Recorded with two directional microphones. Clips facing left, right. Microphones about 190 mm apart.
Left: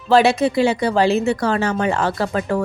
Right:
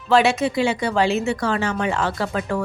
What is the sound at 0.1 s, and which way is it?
A woman's voice, 35° left (ahead or behind).